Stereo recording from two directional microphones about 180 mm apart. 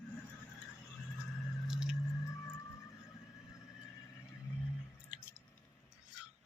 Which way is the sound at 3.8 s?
15° left (ahead or behind).